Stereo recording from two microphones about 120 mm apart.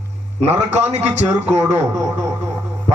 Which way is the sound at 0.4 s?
65° right (ahead or behind).